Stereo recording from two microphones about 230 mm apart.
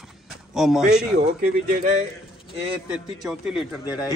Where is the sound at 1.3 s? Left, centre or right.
Right.